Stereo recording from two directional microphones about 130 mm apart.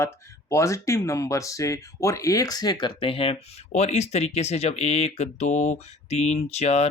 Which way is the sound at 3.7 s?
60° left (ahead or behind).